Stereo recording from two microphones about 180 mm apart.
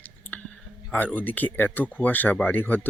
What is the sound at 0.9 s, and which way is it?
Speech, 10° left (ahead or behind).